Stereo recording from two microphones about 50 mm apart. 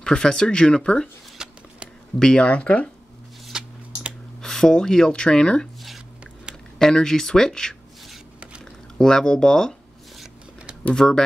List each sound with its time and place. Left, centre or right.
0.0 s speech: centre
1.4 s a sound: centre
2.1 s speech: centre
3.5 s a sound: centre
4.4 s speech: centre
6.8 s speech: centre
8.9 s speech: centre
10.9 s speech: centre